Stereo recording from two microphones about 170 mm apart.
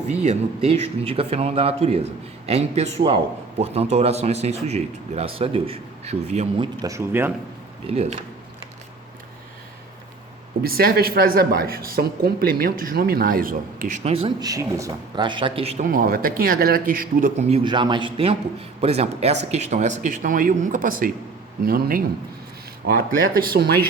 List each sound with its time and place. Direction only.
0.1 s speech: 40° right (ahead or behind)
6.6 s speech: 20° right (ahead or behind)
7.9 s speech: 40° right (ahead or behind)
10.6 s a woman's voice: 60° right (ahead or behind); by 14.3 s 35° right (ahead or behind)
14.4 s a man's voice: 20° right (ahead or behind); by 15.9 s 40° right (ahead or behind)
15.9 s a woman's voice: 55° right (ahead or behind)
17.5 s a man's voice: 30° right (ahead or behind); by 23.8 s 65° right (ahead or behind)